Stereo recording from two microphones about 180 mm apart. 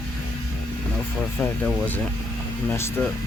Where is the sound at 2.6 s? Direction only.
15° left (ahead or behind).